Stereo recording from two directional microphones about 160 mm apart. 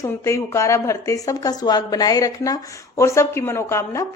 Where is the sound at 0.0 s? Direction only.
20° left (ahead or behind).